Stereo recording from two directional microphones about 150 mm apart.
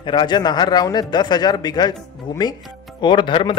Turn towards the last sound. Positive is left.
turn(degrees=35)  # may be behind; listen again after turning